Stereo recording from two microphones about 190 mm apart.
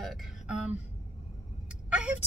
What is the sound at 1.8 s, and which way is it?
Vehicle, 5° right (ahead or behind).